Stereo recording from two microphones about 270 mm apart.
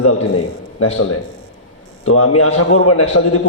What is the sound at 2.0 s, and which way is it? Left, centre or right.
A man's voice, left.